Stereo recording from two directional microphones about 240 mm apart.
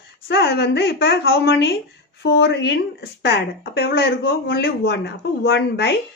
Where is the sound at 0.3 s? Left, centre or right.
Left.